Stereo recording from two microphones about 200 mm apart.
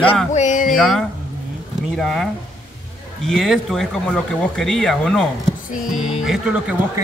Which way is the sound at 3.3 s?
Centre (ahead or behind).